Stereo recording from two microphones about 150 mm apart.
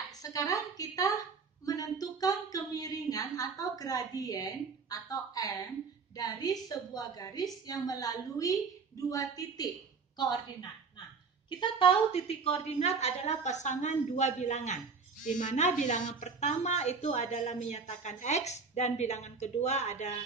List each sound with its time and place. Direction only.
0.2 s a woman's voice: 20° left (ahead or behind); by 20.2 s 50° left (ahead or behind)